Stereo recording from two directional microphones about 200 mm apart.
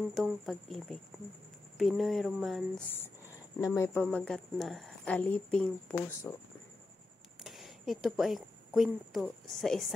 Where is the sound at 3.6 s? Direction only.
15° left (ahead or behind).